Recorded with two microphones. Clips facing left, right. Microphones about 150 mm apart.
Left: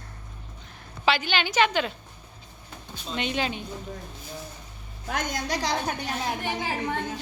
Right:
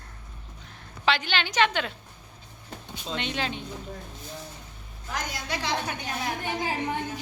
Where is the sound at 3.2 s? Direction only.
5° left (ahead or behind).